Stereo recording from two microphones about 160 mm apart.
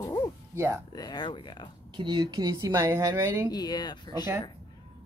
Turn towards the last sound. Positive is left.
turn(degrees=25)  # may be behind; listen again after turning